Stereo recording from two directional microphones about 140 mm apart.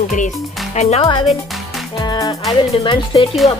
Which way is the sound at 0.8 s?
50° left (ahead or behind).